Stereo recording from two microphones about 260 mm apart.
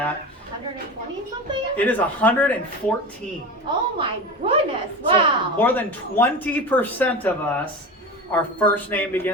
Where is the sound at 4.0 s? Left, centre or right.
Right.